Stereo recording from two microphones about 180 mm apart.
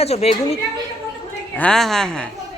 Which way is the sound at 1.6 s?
5° left (ahead or behind).